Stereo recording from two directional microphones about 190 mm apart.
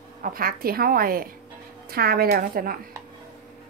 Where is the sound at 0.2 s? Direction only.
50° right (ahead or behind).